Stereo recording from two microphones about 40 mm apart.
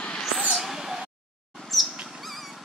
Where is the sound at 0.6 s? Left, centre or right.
Centre.